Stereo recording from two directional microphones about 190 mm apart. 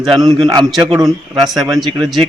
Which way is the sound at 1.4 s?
Centre (ahead or behind).